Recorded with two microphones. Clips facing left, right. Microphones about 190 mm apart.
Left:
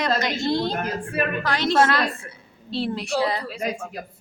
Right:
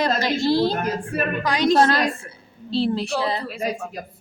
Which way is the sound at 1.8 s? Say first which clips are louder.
Right 2 dB; 35° right (ahead or behind).